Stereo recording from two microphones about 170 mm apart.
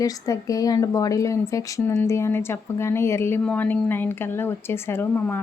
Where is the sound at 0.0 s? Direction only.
20° left (ahead or behind).